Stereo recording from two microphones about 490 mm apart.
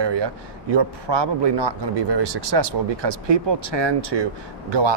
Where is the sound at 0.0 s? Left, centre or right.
Right.